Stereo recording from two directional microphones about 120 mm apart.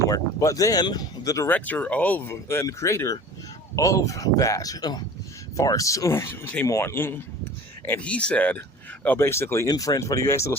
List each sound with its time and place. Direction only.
0.0 s speech: 30° left (ahead or behind)
1.5 s speech: 15° left (ahead or behind)